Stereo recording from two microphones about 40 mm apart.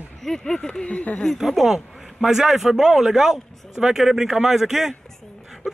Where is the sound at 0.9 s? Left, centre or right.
Left.